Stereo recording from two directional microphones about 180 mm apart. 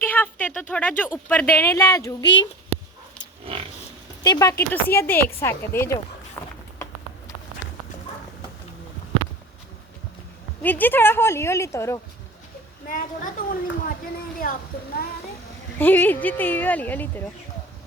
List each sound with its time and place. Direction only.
0.0 s a sound: 10° left (ahead or behind)
0.7 s speech: 10° left (ahead or behind)
4.2 s speech: 20° left (ahead or behind)
6.4 s a sound: 10° left (ahead or behind)
10.6 s speech: 10° left (ahead or behind)
12.9 s a woman's voice: 50° left (ahead or behind)
15.8 s speech: 10° left (ahead or behind)